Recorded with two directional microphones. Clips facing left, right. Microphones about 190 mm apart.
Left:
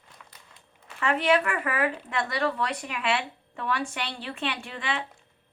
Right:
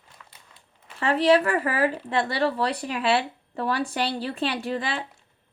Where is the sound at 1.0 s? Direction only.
35° right (ahead or behind).